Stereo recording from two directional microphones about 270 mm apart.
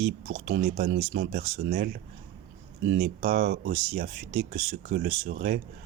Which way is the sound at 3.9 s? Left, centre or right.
Right.